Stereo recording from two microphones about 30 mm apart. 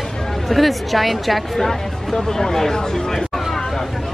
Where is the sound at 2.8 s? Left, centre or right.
Centre.